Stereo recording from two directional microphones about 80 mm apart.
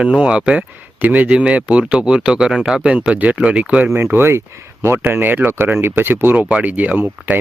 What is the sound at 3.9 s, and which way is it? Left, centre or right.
Speech, right.